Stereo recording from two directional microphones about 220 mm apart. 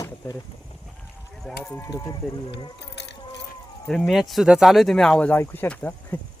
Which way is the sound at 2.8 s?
50° left (ahead or behind).